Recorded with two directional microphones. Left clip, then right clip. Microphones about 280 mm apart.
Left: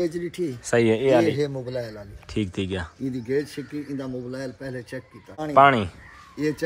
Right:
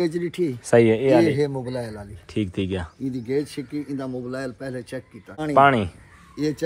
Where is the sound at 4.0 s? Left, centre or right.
Centre.